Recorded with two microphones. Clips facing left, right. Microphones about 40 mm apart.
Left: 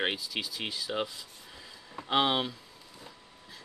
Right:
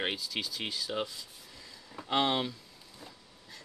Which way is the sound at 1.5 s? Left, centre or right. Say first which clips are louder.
Left 3 dB; left.